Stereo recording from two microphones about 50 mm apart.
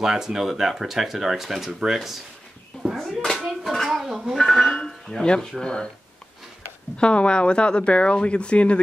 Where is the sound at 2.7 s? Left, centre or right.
Centre.